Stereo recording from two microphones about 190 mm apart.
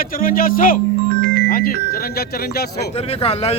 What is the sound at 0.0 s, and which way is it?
Speech, 50° left (ahead or behind).